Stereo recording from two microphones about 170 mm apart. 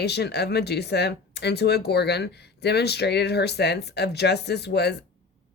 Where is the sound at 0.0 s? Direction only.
75° left (ahead or behind).